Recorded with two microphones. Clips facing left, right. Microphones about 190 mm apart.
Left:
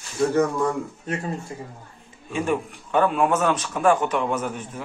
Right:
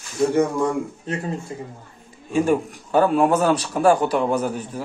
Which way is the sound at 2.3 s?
40° right (ahead or behind).